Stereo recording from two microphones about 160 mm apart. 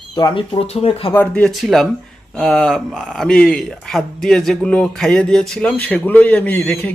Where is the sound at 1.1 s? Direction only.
5° left (ahead or behind).